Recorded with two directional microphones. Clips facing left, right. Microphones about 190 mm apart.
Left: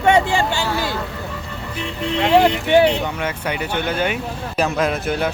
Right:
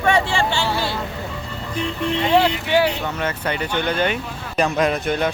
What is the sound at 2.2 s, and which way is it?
Speech, 50° left (ahead or behind).